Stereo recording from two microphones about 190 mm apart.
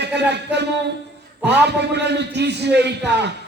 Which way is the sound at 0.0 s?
65° right (ahead or behind).